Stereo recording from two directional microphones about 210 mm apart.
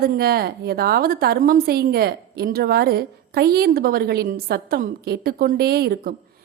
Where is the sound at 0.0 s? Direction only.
45° right (ahead or behind).